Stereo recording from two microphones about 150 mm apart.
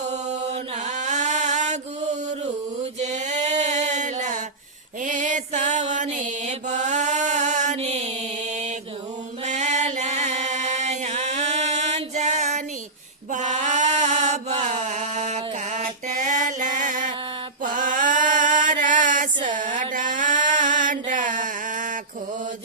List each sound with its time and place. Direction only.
0.1 s chant: 50° right (ahead or behind)
3.0 s a sound: 50° right (ahead or behind)
5.0 s mantra: 60° right (ahead or behind)
9.5 s mantra: 50° right (ahead or behind)
15.8 s music: 55° right (ahead or behind)
16.8 s mantra: 60° right (ahead or behind)
19.9 s a sound: 60° right (ahead or behind)
20.6 s mantra: 60° right (ahead or behind)